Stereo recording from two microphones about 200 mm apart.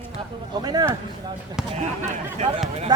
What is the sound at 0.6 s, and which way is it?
Speech, 20° right (ahead or behind).